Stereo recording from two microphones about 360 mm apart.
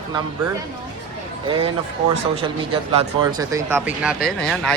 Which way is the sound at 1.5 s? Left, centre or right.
Centre.